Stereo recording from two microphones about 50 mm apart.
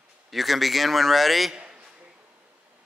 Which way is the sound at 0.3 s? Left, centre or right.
Centre.